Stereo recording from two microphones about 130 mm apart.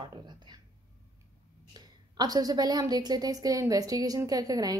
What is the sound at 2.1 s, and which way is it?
A woman's voice, 30° right (ahead or behind).